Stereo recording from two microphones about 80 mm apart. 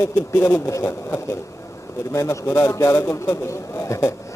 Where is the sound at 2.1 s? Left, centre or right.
Left.